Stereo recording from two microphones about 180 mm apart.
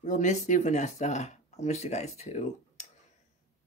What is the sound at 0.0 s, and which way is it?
Speech, 45° left (ahead or behind).